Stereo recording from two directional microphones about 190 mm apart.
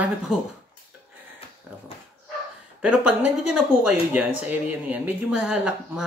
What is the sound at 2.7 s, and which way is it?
Speech, 5° right (ahead or behind).